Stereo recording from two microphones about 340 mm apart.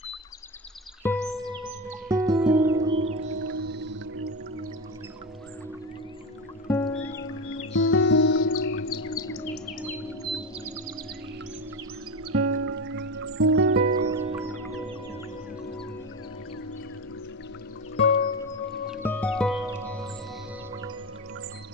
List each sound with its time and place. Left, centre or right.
1.2 s music: centre
3.5 s music: right
6.7 s music: centre
7.5 s music: left
12.3 s music: right
13.9 s music: centre
17.9 s music: centre
19.0 s music: centre